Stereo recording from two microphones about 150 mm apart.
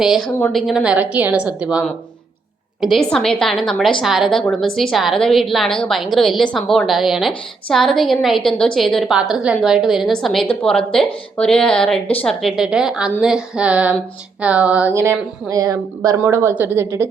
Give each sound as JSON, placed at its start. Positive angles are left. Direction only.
{"t": 0.0, "sound": "a woman's voice", "side_deg": -5}